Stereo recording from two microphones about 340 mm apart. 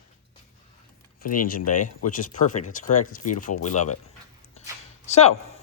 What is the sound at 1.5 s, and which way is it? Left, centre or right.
Speech, left.